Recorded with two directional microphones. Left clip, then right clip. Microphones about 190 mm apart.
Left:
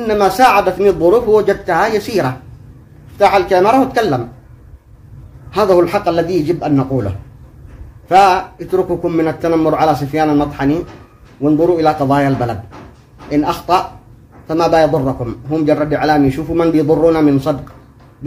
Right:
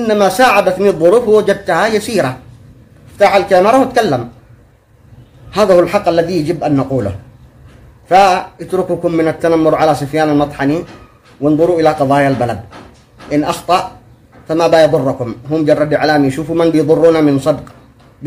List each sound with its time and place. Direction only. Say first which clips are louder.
0.0 s a man's voice: right 1 dB; 20° right (ahead or behind)
5.5 s a man's voice: right 2 dB; 15° right (ahead or behind)